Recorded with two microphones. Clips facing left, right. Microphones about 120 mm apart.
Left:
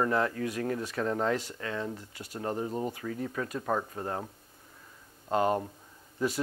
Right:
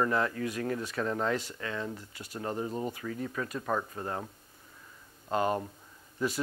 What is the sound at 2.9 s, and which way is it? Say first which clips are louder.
Speech: left 1 dB; 35° left (ahead or behind).